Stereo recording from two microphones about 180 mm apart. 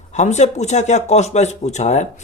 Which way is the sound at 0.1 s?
40° left (ahead or behind).